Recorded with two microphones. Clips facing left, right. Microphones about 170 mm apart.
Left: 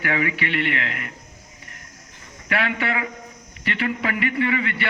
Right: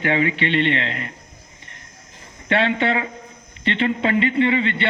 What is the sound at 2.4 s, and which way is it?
A man's voice, 25° right (ahead or behind).